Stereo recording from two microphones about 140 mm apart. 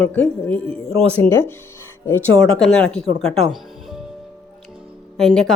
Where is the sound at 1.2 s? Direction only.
15° left (ahead or behind).